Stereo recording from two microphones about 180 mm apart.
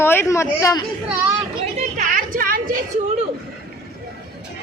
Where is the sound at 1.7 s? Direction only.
45° right (ahead or behind).